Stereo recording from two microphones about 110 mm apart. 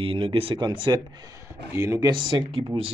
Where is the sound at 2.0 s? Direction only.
45° right (ahead or behind).